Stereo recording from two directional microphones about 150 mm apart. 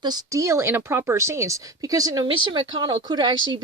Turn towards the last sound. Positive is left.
turn(degrees=-30)  # may be behind; listen again after turning